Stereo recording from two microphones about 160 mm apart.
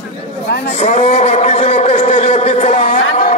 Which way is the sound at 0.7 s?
40° left (ahead or behind).